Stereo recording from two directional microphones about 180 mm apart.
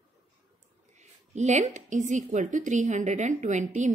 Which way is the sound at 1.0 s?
40° right (ahead or behind).